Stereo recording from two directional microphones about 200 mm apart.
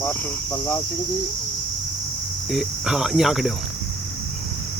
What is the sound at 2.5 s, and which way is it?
Cricket, centre (ahead or behind).